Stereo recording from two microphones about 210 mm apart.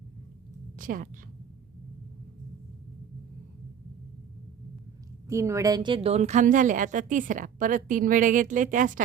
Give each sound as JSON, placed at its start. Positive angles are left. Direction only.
{"t": 0.8, "sound": "a woman's voice", "side_deg": -40}
{"t": 5.3, "sound": "a woman's voice", "side_deg": -15}